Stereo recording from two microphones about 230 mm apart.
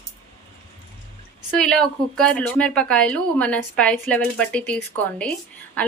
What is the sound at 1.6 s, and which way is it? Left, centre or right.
Speech, centre.